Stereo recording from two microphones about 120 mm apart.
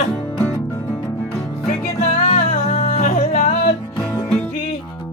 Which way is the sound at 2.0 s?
60° left (ahead or behind).